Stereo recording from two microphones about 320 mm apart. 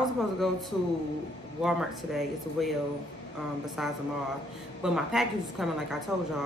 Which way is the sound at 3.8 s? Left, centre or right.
Centre.